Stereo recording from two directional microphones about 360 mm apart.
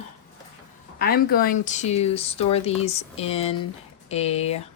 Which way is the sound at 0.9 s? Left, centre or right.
Left.